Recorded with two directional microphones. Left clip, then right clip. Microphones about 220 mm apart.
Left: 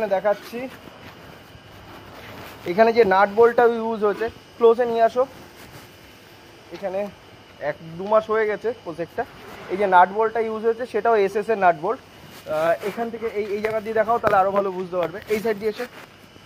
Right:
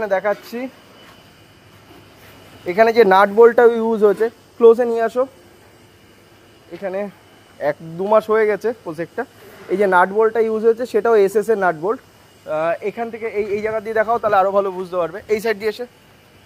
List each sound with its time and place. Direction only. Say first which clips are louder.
0.0 s speech: right 2 dB; 45° right (ahead or behind)
2.7 s speech: right 4 dB; 45° right (ahead or behind)
6.8 s speech: right 2 dB; 50° right (ahead or behind)
12.4 s speech: right 1 dB; 40° right (ahead or behind); by 15.8 s 60° right (ahead or behind)